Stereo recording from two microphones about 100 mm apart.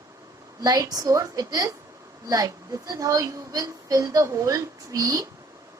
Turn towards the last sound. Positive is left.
turn(degrees=-35)  # may be behind; listen again after turning